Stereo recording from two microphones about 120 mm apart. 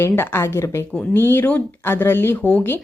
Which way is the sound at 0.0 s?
20° left (ahead or behind).